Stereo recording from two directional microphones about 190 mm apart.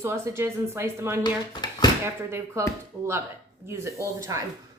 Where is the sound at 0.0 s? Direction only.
15° right (ahead or behind).